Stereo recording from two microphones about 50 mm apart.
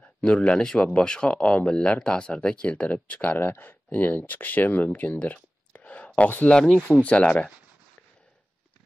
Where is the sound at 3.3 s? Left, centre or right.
Left.